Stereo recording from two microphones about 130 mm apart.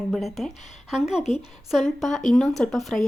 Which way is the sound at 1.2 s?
55° left (ahead or behind).